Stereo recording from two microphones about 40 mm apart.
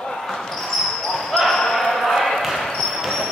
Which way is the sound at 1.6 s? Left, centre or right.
Centre.